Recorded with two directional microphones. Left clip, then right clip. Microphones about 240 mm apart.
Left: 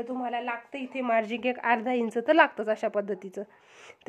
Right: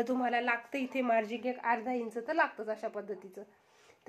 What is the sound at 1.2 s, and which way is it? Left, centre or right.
Speech, centre.